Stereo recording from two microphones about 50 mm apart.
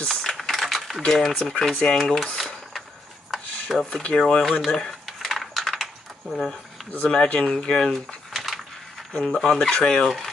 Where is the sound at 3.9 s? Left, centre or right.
Left.